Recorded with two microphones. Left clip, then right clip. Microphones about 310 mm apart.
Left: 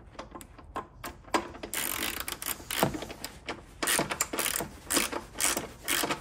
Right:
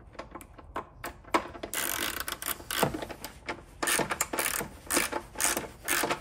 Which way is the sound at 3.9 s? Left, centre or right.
Centre.